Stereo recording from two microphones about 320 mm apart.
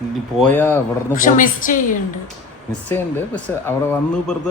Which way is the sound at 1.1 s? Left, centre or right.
Left.